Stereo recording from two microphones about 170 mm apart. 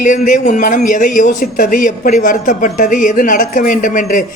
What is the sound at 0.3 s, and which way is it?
Speech, 50° left (ahead or behind).